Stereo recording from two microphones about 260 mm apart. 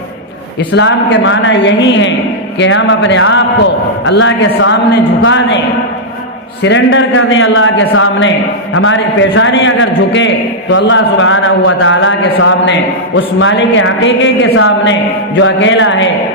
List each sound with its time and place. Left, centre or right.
0.7 s a man's voice: left
6.6 s a man's voice: left